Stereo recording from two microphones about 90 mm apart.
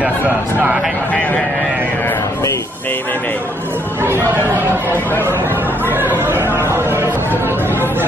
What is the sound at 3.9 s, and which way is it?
Speech, 25° right (ahead or behind).